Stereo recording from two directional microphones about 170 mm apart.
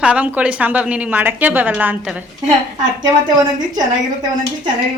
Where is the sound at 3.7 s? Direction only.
25° right (ahead or behind).